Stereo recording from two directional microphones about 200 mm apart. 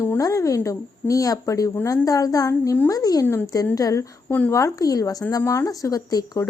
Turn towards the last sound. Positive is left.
turn(degrees=20)  # may be behind; listen again after turning